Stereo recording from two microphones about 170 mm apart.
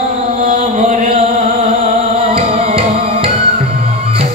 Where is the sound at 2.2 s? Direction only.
35° right (ahead or behind).